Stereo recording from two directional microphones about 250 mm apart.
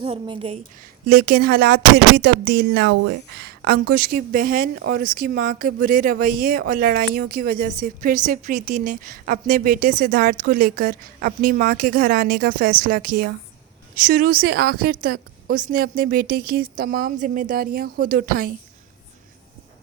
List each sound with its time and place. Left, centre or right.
0.0 s a woman's voice: right
1.0 s speech: right